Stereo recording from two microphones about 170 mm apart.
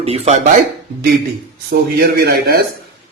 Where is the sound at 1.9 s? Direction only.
65° right (ahead or behind).